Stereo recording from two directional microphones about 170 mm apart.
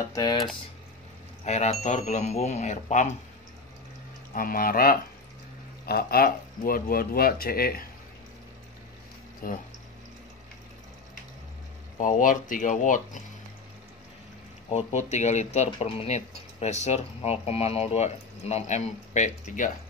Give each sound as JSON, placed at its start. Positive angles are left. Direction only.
{"t": 0.1, "sound": "speech", "side_deg": 25}
{"t": 1.4, "sound": "speech", "side_deg": 40}
{"t": 4.3, "sound": "speech", "side_deg": 55}
{"t": 9.4, "sound": "speech", "side_deg": 55}
{"t": 12.0, "sound": "speech", "side_deg": 50}
{"t": 14.7, "sound": "speech", "side_deg": 40}